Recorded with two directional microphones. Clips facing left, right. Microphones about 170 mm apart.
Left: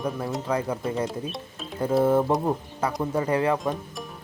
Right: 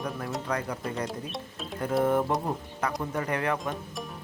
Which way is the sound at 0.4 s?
25° left (ahead or behind).